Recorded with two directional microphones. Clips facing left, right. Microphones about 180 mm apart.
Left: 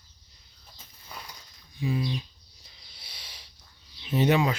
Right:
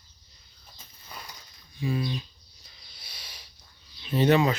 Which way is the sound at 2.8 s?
25° left (ahead or behind).